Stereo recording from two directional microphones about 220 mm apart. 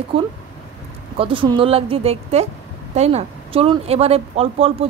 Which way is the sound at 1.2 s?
25° right (ahead or behind).